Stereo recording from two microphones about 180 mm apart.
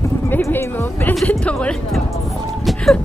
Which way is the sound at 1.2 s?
5° left (ahead or behind).